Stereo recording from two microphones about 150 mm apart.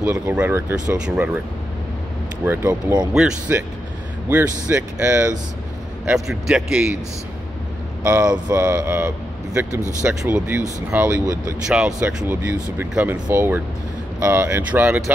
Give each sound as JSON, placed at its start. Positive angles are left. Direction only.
{"t": 0.3, "sound": "speech", "side_deg": -15}
{"t": 2.4, "sound": "speech", "side_deg": -15}
{"t": 8.0, "sound": "speech", "side_deg": -20}
{"t": 11.6, "sound": "speech", "side_deg": -5}